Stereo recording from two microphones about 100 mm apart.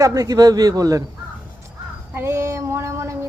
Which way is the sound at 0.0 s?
35° right (ahead or behind).